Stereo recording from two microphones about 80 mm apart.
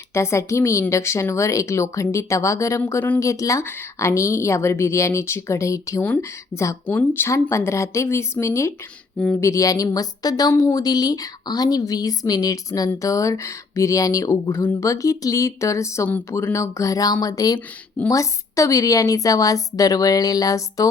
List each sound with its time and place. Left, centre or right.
0.1 s speech: left
6.0 s a woman's voice: left
10.5 s speech: left
10.8 s a woman's voice: left